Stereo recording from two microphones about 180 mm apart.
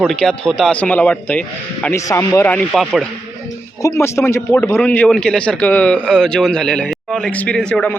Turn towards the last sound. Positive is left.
turn(degrees=5)  # may be behind; listen again after turning